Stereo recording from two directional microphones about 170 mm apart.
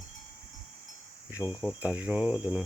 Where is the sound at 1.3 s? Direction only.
10° right (ahead or behind).